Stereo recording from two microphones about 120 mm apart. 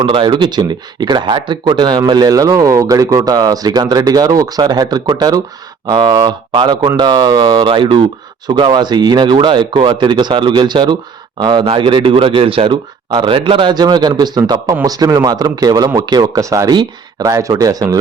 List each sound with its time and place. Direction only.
0.0 s speech: 45° right (ahead or behind)